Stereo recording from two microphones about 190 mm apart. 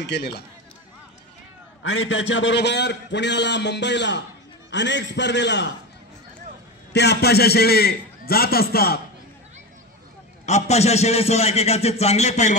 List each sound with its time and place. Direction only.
0.0 s a man's voice: 60° left (ahead or behind)
1.8 s a man's voice: 70° left (ahead or behind)
6.9 s a man's voice: 60° left (ahead or behind)
10.4 s a man's voice: 35° left (ahead or behind)